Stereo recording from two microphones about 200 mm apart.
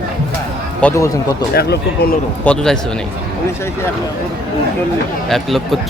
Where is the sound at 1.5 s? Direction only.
55° left (ahead or behind).